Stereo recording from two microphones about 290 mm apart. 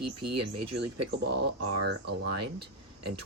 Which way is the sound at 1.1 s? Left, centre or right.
Right.